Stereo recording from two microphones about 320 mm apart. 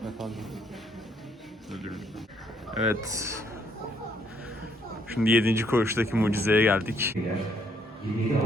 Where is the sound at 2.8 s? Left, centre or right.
Centre.